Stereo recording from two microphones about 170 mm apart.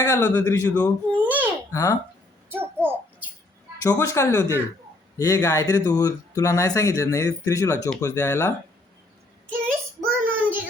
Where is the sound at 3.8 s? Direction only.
15° left (ahead or behind).